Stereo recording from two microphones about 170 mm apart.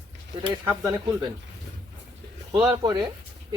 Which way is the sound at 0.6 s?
15° right (ahead or behind).